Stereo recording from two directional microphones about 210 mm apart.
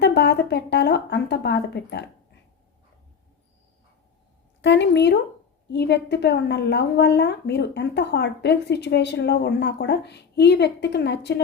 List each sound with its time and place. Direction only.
0.0 s a woman's voice: 55° left (ahead or behind)
4.6 s a woman's voice: 55° left (ahead or behind)